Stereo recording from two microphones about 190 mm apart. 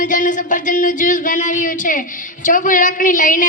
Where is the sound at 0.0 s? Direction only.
45° left (ahead or behind).